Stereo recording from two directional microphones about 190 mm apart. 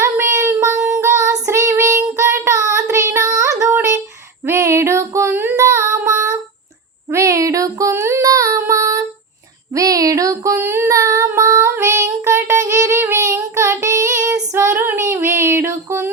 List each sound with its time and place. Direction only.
0.0 s child singing: 15° right (ahead or behind)
4.4 s female singing: 15° right (ahead or behind)
7.1 s child singing: 15° right (ahead or behind)
9.7 s female singing: 20° right (ahead or behind)